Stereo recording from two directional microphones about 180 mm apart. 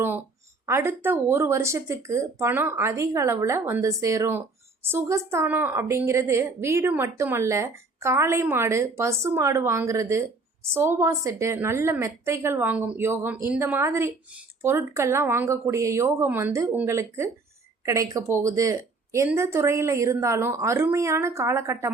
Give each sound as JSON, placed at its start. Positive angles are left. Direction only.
{"t": 0.6, "sound": "a woman's voice", "side_deg": -15}